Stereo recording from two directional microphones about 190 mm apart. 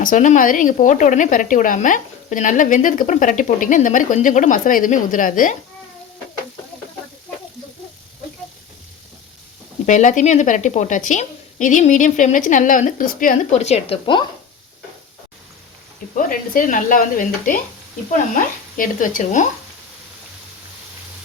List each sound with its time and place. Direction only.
0.0 s a woman's voice: 45° left (ahead or behind)
9.8 s a woman's voice: 40° left (ahead or behind)
16.1 s a woman's voice: 45° left (ahead or behind)